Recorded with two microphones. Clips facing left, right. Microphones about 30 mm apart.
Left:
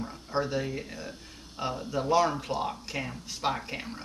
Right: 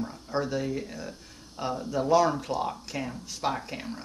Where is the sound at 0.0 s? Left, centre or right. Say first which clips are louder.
Right 1 dB; centre.